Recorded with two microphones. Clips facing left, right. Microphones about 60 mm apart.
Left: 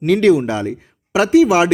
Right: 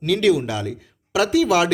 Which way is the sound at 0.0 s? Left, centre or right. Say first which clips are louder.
Left 5 dB; left.